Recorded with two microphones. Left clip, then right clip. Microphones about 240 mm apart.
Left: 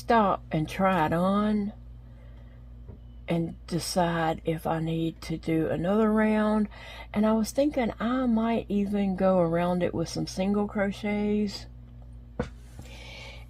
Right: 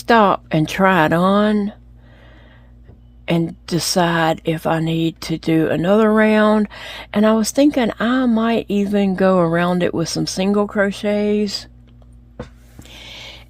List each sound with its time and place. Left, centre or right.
0.0 s speech: right
3.2 s speech: right
12.9 s owl: right